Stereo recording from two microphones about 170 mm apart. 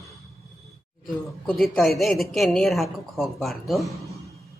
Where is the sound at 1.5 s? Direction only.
Centre (ahead or behind).